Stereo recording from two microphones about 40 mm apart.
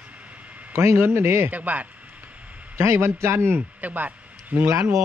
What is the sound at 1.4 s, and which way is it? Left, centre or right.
Speech, right.